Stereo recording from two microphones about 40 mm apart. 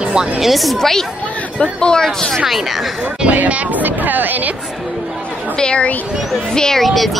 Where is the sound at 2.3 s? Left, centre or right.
Centre.